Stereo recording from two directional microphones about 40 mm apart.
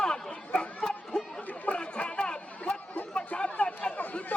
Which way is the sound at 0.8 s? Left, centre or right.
Left.